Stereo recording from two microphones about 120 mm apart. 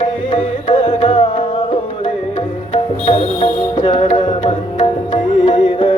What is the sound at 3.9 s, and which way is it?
Music, 75° left (ahead or behind).